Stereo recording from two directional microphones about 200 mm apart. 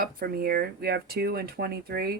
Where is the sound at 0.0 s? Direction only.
50° right (ahead or behind).